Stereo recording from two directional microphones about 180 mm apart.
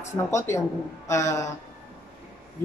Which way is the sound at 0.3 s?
15° left (ahead or behind).